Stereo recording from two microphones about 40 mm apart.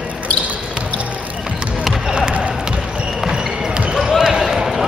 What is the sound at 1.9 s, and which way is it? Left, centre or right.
Basketball bounce, centre.